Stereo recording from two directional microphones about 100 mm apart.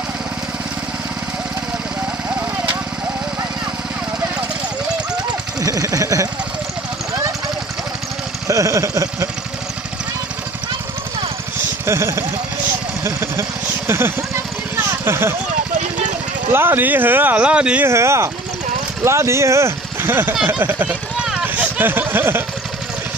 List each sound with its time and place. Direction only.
5.6 s speech: 35° right (ahead or behind)
8.5 s a sound: 30° right (ahead or behind)
11.8 s speech: 30° right (ahead or behind)
16.5 s speech: 20° right (ahead or behind)
17.8 s speech: 30° right (ahead or behind)
20.4 s run: 20° right (ahead or behind)